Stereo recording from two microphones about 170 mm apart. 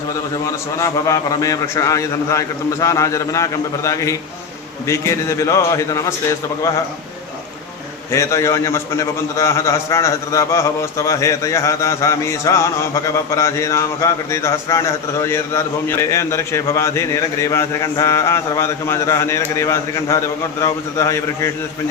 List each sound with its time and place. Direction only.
0.8 s a man's voice: 20° left (ahead or behind)
8.1 s a man's voice: 15° left (ahead or behind)